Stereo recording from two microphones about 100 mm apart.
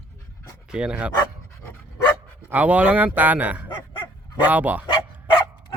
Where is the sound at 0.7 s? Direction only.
10° right (ahead or behind).